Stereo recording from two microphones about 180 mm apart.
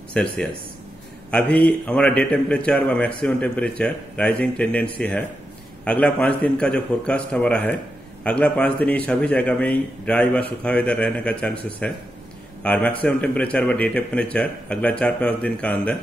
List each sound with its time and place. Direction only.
0.1 s a man's voice: 5° left (ahead or behind)